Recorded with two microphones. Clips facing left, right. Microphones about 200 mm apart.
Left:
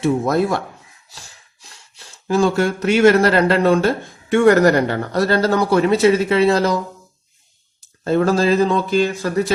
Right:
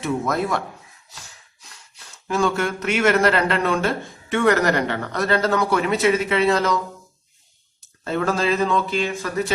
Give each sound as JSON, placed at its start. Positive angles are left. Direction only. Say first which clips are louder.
{"t": 0.0, "sound": "speech", "louder": "left 6 dB", "side_deg": 30}
{"t": 2.2, "sound": "speech", "louder": "left 5 dB", "side_deg": 35}
{"t": 8.0, "sound": "speech", "louder": "left 6 dB", "side_deg": 35}